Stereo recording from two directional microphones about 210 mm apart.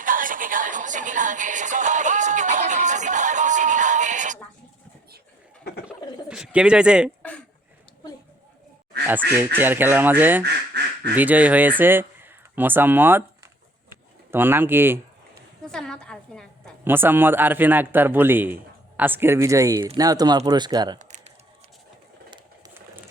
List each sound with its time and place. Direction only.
0.0 s music: 40° right (ahead or behind)
6.2 s speech: 5° right (ahead or behind)
9.6 s a man's voice: 10° right (ahead or behind)
10.4 s quack: 50° right (ahead or behind)
11.1 s a man's voice: 5° right (ahead or behind)
15.6 s a sound: 5° left (ahead or behind)
16.8 s a man's voice: 10° right (ahead or behind)
21.0 s a sound: 35° right (ahead or behind)